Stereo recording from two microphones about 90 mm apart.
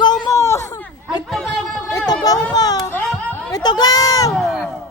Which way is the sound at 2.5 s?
45° left (ahead or behind).